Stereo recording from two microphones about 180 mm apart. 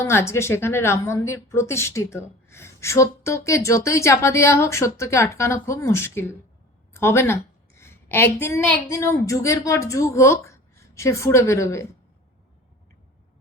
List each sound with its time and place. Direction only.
0.0 s a woman's voice: 15° left (ahead or behind)